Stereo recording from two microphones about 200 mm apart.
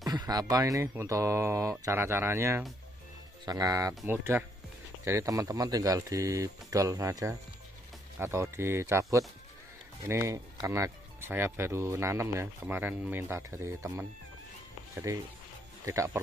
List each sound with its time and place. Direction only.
0.0 s speech: 20° right (ahead or behind)
15.8 s speech: 15° right (ahead or behind)